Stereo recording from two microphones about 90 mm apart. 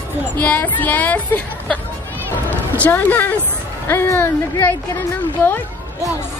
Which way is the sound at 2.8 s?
20° left (ahead or behind).